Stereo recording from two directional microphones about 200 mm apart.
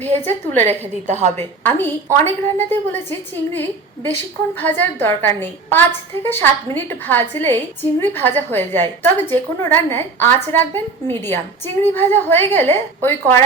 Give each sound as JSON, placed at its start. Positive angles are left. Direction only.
{"t": 0.3, "sound": "a woman's voice", "side_deg": 10}
{"t": 0.7, "sound": "a woman's voice", "side_deg": -35}
{"t": 1.6, "sound": "a woman's voice", "side_deg": 10}